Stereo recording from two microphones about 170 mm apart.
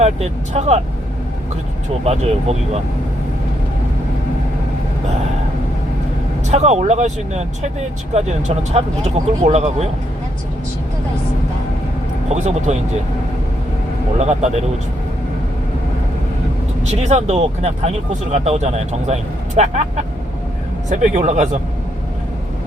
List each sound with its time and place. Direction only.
0.0 s speech: 40° right (ahead or behind)
2.0 s speech: 40° right (ahead or behind)
6.5 s speech: 40° right (ahead or behind)
12.3 s speech: 40° right (ahead or behind)
14.2 s speech: 40° right (ahead or behind)
16.8 s speech: 40° right (ahead or behind)
20.9 s speech: 45° right (ahead or behind)